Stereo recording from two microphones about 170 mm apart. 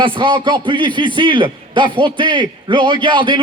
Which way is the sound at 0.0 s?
30° right (ahead or behind).